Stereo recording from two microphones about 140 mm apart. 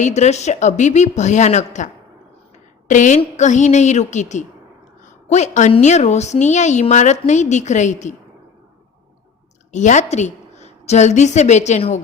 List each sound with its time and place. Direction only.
0.0 s a woman's voice: 55° left (ahead or behind)
9.7 s a woman's voice: 60° left (ahead or behind)